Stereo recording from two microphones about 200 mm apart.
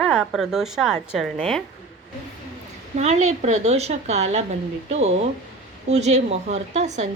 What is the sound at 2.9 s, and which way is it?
A woman's voice, 35° right (ahead or behind).